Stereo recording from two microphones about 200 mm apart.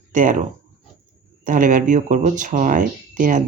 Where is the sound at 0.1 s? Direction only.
40° right (ahead or behind).